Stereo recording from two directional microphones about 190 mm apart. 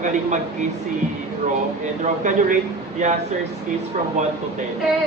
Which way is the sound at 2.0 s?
40° right (ahead or behind).